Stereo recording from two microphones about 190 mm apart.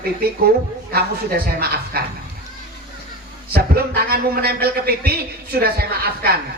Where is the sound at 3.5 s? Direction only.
55° right (ahead or behind).